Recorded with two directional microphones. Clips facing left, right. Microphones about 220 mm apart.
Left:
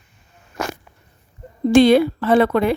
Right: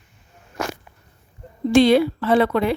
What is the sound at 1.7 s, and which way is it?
Speech, 50° left (ahead or behind).